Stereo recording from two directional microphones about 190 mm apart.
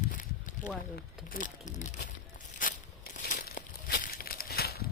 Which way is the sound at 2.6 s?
45° left (ahead or behind).